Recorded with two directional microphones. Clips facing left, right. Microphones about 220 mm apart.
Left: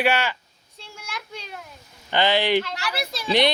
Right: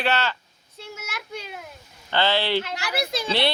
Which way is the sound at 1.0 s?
5° right (ahead or behind).